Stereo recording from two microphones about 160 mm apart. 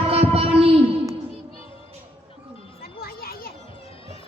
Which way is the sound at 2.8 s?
70° left (ahead or behind).